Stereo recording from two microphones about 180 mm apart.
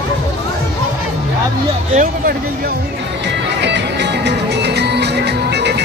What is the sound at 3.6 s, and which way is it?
Music, 75° right (ahead or behind).